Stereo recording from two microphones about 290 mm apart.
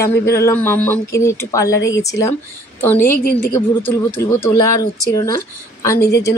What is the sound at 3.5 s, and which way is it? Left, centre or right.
Speech, centre.